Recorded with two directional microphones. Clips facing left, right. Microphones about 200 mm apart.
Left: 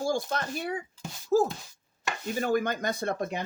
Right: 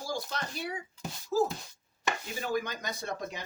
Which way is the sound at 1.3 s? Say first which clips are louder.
Left 4 dB; 50° left (ahead or behind).